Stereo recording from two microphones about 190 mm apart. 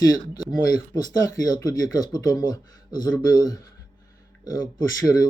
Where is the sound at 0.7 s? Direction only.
20° left (ahead or behind).